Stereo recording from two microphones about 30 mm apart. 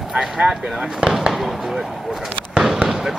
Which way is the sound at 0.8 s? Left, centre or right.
Right.